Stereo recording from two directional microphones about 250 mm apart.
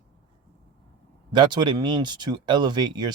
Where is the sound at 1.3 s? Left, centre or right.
Centre.